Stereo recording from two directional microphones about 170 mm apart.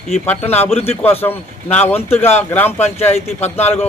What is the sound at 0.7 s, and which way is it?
Speech, 35° left (ahead or behind).